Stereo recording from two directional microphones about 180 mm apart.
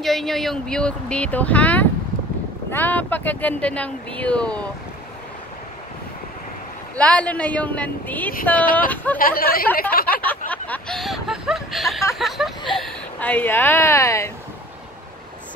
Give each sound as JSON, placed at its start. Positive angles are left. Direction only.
{"t": 0.0, "sound": "a woman's voice", "side_deg": 0}
{"t": 7.0, "sound": "a woman's voice", "side_deg": 5}
{"t": 9.2, "sound": "speech", "side_deg": 55}
{"t": 10.1, "sound": "a sound", "side_deg": 10}
{"t": 12.2, "sound": "speech", "side_deg": 0}